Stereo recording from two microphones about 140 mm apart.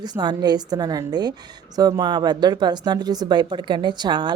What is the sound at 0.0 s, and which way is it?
A woman's voice, 30° right (ahead or behind).